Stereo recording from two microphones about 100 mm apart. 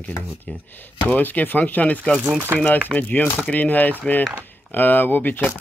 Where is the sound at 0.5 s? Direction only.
15° left (ahead or behind).